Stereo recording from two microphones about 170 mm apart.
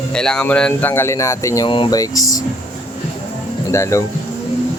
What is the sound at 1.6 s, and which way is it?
Speech, 30° left (ahead or behind).